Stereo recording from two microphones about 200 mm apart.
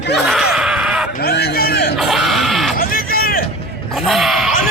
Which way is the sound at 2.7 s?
45° left (ahead or behind).